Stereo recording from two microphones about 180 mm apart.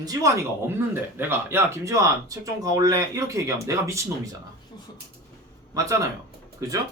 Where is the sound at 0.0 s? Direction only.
20° right (ahead or behind).